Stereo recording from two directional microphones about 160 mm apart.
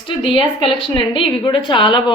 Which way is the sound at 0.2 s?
35° left (ahead or behind).